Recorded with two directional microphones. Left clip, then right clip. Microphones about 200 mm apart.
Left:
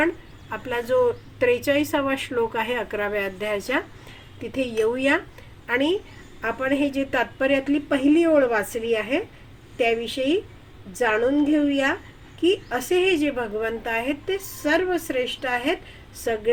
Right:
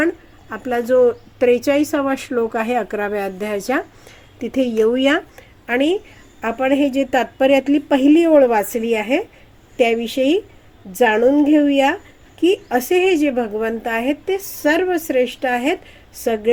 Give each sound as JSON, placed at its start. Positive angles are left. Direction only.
{"t": 0.5, "sound": "a woman's voice", "side_deg": -45}